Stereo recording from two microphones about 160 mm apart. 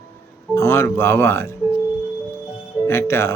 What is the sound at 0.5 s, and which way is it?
Speech, 20° left (ahead or behind).